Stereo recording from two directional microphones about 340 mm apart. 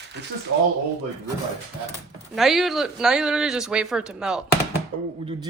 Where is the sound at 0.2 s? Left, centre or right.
Right.